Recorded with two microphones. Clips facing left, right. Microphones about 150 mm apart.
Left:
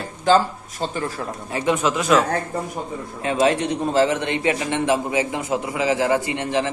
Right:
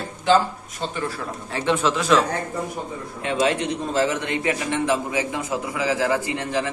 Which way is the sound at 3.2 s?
35° left (ahead or behind).